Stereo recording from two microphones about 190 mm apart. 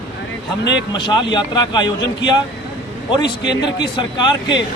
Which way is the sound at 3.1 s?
20° left (ahead or behind).